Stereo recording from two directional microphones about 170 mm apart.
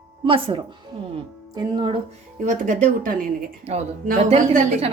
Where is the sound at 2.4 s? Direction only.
45° right (ahead or behind).